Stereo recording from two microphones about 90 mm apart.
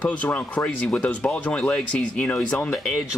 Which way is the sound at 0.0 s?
15° left (ahead or behind).